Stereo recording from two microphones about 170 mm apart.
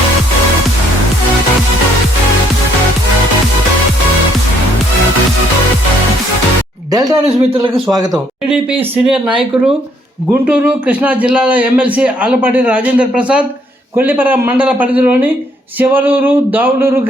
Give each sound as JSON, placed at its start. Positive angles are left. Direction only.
{"t": 6.9, "sound": "speech", "side_deg": -20}
{"t": 8.4, "sound": "a man's voice", "side_deg": -10}